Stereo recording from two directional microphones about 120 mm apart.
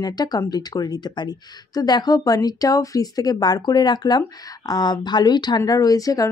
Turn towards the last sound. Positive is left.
turn(degrees=30)  # may be behind; listen again after turning